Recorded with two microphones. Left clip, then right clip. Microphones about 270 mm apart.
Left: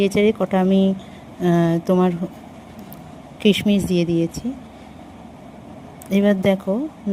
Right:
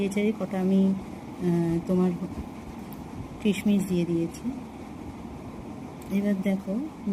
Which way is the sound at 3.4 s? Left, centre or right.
Left.